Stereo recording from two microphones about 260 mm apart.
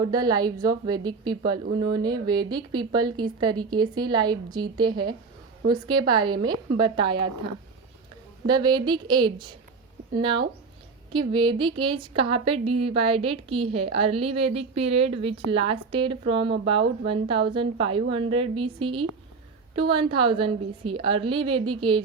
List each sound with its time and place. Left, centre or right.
0.0 s a woman's voice: centre